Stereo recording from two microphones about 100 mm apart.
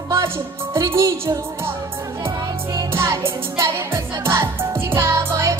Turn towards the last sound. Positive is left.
turn(degrees=-30)  # may be behind; listen again after turning